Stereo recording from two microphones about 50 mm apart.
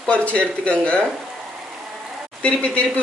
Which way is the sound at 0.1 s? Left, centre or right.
Left.